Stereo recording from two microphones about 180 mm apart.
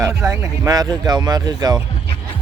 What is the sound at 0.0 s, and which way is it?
Speech, 15° right (ahead or behind).